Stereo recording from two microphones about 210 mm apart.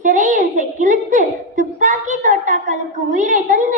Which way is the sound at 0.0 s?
40° right (ahead or behind).